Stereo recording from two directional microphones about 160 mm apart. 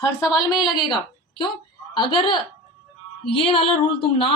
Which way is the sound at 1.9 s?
30° left (ahead or behind).